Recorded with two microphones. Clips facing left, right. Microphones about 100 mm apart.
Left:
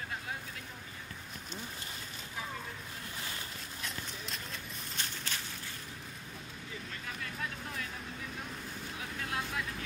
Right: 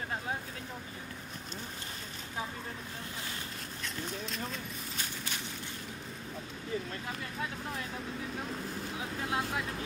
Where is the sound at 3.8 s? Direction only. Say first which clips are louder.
Right 5 dB; centre (ahead or behind).